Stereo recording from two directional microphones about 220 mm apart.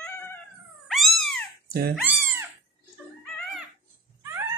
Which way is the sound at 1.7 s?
45° right (ahead or behind).